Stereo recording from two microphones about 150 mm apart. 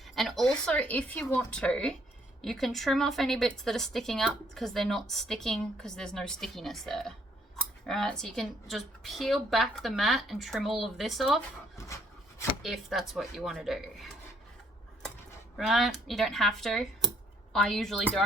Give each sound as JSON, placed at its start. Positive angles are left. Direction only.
{"t": 0.0, "sound": "a woman's voice", "side_deg": 0}
{"t": 12.6, "sound": "a woman's voice", "side_deg": 0}
{"t": 15.5, "sound": "a woman's voice", "side_deg": 0}